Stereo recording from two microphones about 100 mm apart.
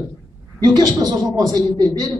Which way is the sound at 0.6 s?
40° right (ahead or behind).